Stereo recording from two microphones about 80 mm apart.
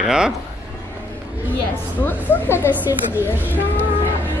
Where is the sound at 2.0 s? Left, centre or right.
Left.